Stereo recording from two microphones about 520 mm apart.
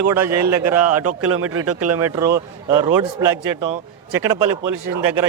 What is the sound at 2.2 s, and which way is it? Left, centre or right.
Speech, centre.